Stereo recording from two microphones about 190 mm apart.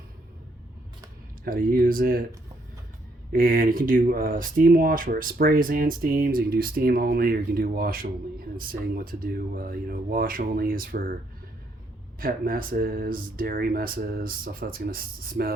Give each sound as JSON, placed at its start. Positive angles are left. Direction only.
{"t": 1.5, "sound": "speech", "side_deg": -45}
{"t": 3.3, "sound": "speech", "side_deg": -50}
{"t": 12.2, "sound": "speech", "side_deg": -50}